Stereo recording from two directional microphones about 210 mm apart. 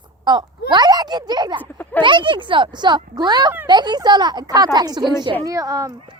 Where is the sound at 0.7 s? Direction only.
20° right (ahead or behind).